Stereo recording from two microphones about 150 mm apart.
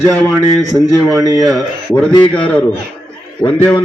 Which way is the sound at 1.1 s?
25° right (ahead or behind).